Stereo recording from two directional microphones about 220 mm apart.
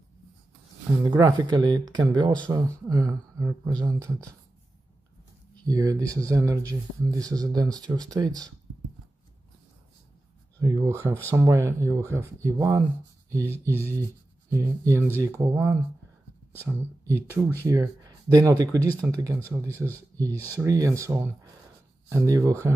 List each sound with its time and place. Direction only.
1.0 s speech: 15° right (ahead or behind)
5.7 s speech: 15° right (ahead or behind)
10.6 s speech: 15° right (ahead or behind)
20.3 s speech: 10° left (ahead or behind)
20.6 s speech: 15° right (ahead or behind)